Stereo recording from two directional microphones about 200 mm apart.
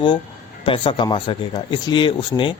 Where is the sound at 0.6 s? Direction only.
25° left (ahead or behind).